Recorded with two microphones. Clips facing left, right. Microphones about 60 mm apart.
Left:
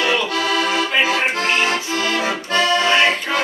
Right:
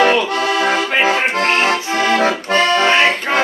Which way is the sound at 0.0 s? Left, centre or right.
Right.